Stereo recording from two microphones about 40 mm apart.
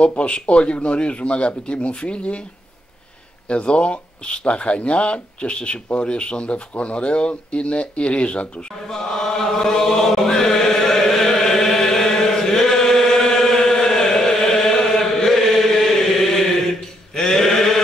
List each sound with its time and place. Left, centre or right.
0.0 s speech: left
3.4 s speech: left
8.9 s chant: centre
17.1 s sheep: centre